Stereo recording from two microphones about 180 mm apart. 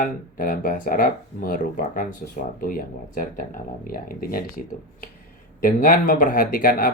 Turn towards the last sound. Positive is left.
turn(degrees=55)  # may be behind; listen again after turning